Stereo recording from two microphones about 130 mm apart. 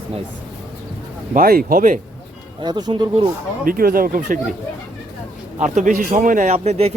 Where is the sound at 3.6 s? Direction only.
90° right.